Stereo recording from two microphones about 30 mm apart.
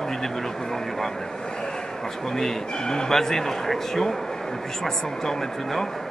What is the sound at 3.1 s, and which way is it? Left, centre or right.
A man's voice, centre.